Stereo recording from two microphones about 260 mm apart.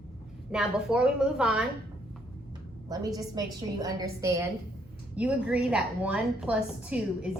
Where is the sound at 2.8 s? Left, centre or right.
Centre.